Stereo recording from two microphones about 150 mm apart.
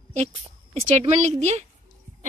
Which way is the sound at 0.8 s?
45° right (ahead or behind).